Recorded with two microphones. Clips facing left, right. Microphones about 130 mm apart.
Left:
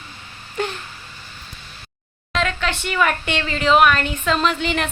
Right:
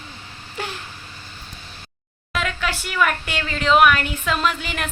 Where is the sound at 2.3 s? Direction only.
5° right (ahead or behind).